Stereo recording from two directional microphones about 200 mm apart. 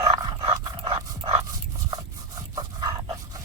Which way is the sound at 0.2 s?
20° right (ahead or behind).